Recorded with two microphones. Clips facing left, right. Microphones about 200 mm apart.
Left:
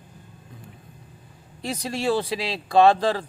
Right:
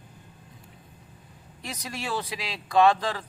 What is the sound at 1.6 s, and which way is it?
Speech, 30° left (ahead or behind).